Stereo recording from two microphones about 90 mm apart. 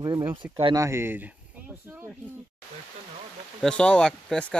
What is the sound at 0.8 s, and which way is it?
Speech, 30° right (ahead or behind).